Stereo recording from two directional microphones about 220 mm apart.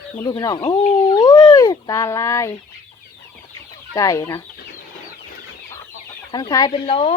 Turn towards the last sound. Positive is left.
turn(degrees=25)  # may be behind; listen again after turning